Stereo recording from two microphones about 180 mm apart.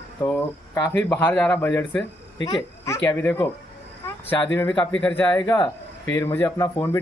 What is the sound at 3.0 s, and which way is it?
Speech, 10° left (ahead or behind).